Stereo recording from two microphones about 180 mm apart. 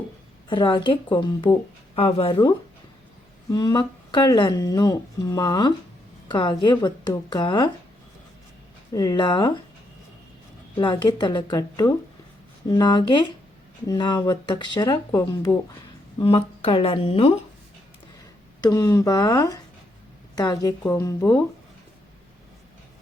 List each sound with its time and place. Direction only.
0.4 s speech: 25° left (ahead or behind)
3.5 s speech: 25° left (ahead or behind)
8.9 s speech: 20° left (ahead or behind)
10.8 s speech: 25° left (ahead or behind)
16.1 s speech: 30° left (ahead or behind)
18.6 s speech: 20° left (ahead or behind)